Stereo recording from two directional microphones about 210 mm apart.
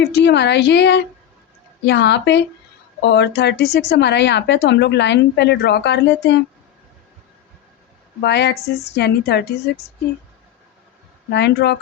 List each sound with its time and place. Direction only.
0.0 s a woman's voice: 55° left (ahead or behind)
8.2 s a woman's voice: 55° left (ahead or behind)
11.3 s a woman's voice: 55° left (ahead or behind)